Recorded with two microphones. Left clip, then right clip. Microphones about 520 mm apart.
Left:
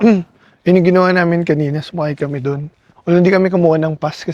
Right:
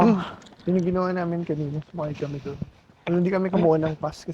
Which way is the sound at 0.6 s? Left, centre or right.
Left.